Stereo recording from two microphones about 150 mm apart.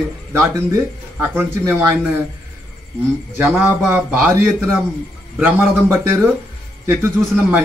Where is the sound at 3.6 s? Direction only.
15° right (ahead or behind).